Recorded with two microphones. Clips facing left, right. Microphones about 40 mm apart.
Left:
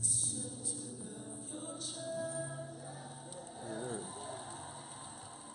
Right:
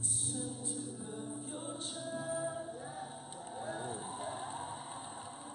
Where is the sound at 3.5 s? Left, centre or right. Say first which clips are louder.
Right 1 dB; right.